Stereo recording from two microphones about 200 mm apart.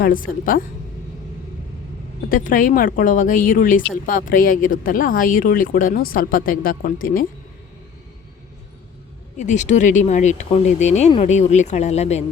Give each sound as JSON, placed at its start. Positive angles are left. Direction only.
{"t": 0.0, "sound": "speech", "side_deg": 45}
{"t": 2.3, "sound": "speech", "side_deg": 40}
{"t": 9.4, "sound": "speech", "side_deg": 35}